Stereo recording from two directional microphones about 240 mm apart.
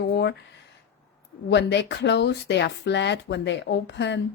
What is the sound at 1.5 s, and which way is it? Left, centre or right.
A woman's voice, left.